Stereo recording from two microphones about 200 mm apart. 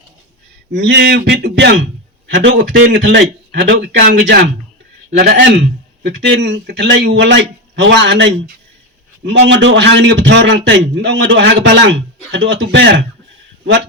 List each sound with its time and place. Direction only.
0.7 s a man's voice: 60° right (ahead or behind)